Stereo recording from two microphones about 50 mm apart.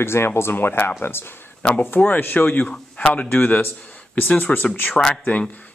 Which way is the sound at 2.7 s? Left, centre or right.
Left.